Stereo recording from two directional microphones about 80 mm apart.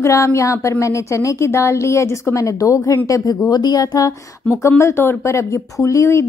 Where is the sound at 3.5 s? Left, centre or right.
Left.